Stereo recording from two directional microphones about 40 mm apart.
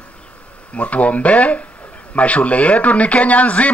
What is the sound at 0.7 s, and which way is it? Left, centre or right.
Speech, left.